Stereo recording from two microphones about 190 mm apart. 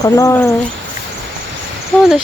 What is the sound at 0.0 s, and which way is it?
Speech, 15° left (ahead or behind).